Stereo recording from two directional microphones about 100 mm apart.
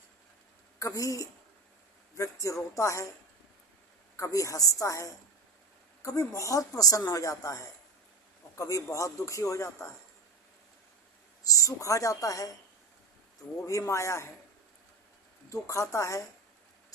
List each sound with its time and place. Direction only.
0.8 s speech: 35° left (ahead or behind)
4.2 s speech: 35° left (ahead or behind)
11.4 s speech: 35° left (ahead or behind)
13.7 s a man's voice: 30° left (ahead or behind)
15.4 s speech: 30° left (ahead or behind)